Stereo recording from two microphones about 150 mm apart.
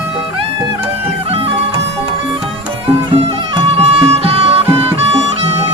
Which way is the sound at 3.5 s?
40° right (ahead or behind).